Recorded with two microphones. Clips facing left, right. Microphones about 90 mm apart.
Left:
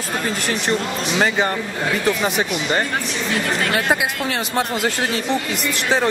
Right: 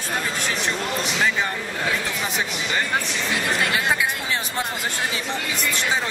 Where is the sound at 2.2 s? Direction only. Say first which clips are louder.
Left 6 dB; 50° left (ahead or behind); by 5.1 s 75° left (ahead or behind).